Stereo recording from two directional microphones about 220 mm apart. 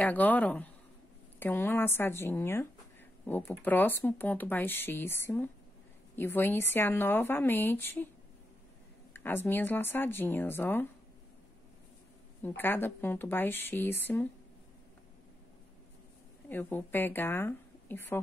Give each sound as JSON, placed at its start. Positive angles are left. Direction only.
{"t": 0.0, "sound": "speech", "side_deg": 5}
{"t": 9.1, "sound": "speech", "side_deg": 10}
{"t": 12.4, "sound": "speech", "side_deg": 10}
{"t": 16.4, "sound": "speech", "side_deg": 10}